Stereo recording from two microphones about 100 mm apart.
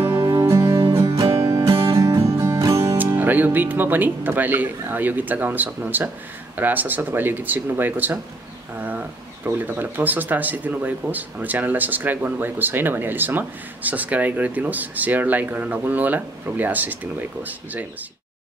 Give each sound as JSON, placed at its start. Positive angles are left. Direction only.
{"t": 0.3, "sound": "music", "side_deg": -35}
{"t": 1.7, "sound": "music", "side_deg": -60}
{"t": 2.0, "sound": "music", "side_deg": -35}
{"t": 3.0, "sound": "speech", "side_deg": -20}